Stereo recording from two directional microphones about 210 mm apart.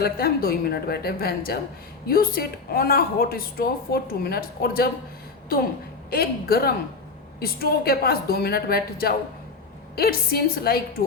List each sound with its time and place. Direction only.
0.0 s speech: 45° left (ahead or behind)
6.1 s speech: 45° left (ahead or behind)